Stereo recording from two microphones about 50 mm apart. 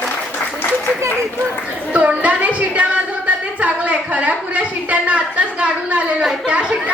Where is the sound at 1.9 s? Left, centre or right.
Right.